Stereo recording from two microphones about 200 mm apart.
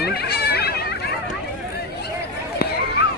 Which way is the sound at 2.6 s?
50° left (ahead or behind).